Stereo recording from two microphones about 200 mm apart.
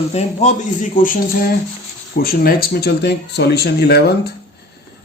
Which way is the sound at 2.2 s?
50° left (ahead or behind).